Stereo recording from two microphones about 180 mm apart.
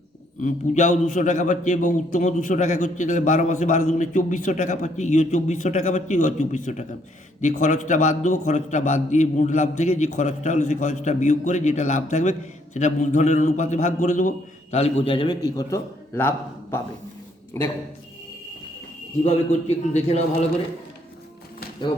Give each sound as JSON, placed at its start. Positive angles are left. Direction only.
{"t": 0.4, "sound": "a man's voice", "side_deg": 45}
{"t": 19.2, "sound": "a man's voice", "side_deg": 35}